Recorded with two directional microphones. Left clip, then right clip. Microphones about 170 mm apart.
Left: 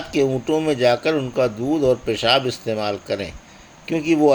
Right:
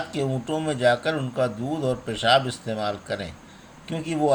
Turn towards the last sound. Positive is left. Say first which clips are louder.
# left 8 dB
turn(degrees=35)  # may be behind; listen again after turning